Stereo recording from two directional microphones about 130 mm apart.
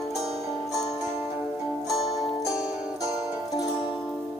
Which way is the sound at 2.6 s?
5° right (ahead or behind).